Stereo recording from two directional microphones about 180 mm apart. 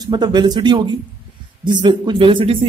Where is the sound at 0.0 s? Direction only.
25° right (ahead or behind).